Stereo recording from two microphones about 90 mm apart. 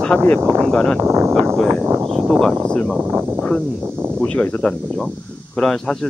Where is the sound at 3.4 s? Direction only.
15° left (ahead or behind).